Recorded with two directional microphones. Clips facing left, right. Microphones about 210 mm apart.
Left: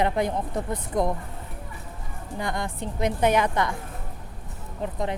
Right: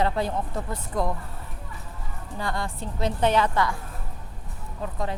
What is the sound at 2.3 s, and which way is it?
Speech, 20° left (ahead or behind).